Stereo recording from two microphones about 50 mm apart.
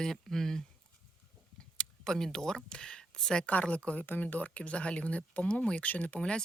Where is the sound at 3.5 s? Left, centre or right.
Left.